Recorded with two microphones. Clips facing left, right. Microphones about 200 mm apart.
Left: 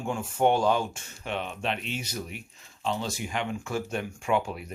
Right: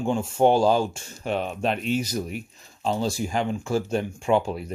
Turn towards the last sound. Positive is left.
turn(degrees=-30)  # may be behind; listen again after turning